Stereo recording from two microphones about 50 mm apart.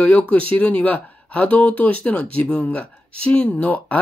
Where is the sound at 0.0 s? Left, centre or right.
Left.